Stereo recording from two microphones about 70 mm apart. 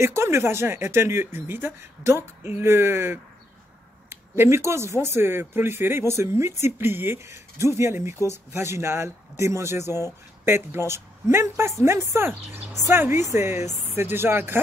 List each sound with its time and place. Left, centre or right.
0.0 s speech: right